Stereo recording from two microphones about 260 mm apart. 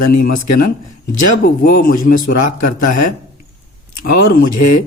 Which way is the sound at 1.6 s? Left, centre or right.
Left.